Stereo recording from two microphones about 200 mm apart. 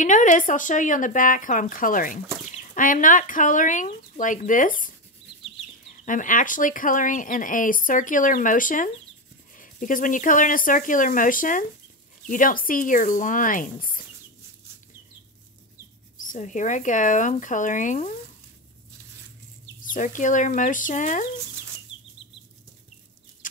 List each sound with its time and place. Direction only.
0.0 s speech: 40° left (ahead or behind)
16.2 s speech: 40° left (ahead or behind)
19.8 s speech: 40° left (ahead or behind)
23.4 s a sound: 40° left (ahead or behind)